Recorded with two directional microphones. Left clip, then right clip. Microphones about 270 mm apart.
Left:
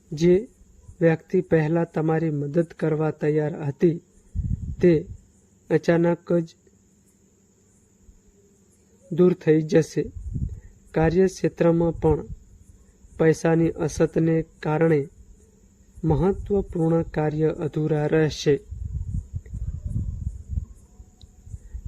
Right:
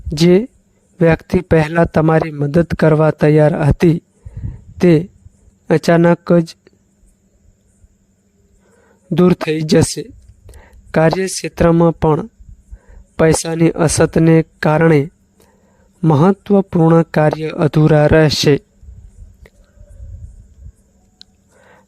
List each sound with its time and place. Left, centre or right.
0.1 s speech: right
9.1 s speech: right
10.9 s speech: right
11.2 s speech: centre
11.4 s speech: right
21.2 s a sound: right